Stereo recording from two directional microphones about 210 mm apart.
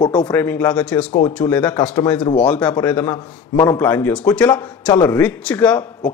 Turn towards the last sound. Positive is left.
turn(degrees=5)  # may be behind; listen again after turning